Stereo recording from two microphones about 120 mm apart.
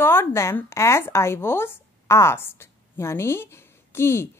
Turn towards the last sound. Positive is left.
turn(degrees=20)  # may be behind; listen again after turning